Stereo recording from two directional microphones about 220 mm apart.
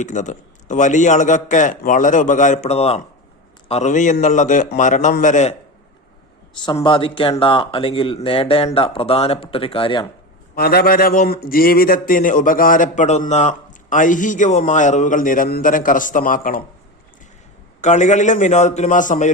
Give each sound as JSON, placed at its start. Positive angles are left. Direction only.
{"t": 0.0, "sound": "a man's voice", "side_deg": 35}
{"t": 6.6, "sound": "a man's voice", "side_deg": 20}
{"t": 10.5, "sound": "a man's voice", "side_deg": 45}
{"t": 17.7, "sound": "a man's voice", "side_deg": 35}